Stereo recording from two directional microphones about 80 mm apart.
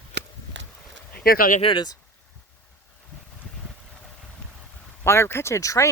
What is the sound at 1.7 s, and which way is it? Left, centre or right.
Speech, left.